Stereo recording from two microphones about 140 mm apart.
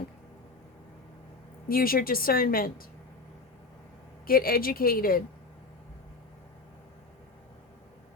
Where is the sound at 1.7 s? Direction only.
90° left.